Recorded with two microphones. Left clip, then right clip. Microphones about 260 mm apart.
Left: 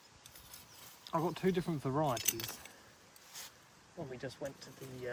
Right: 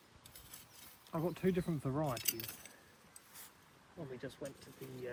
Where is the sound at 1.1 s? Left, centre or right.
Centre.